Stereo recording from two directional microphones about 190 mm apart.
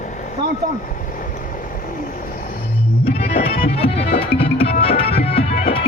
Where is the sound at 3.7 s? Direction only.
30° left (ahead or behind).